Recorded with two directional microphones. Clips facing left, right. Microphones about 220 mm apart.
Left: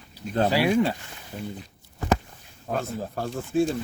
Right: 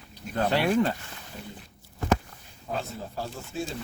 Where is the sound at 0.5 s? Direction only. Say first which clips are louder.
Left 1 dB; 5° left (ahead or behind).